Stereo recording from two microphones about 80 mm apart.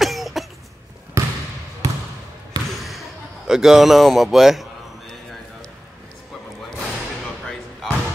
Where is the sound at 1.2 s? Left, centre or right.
Right.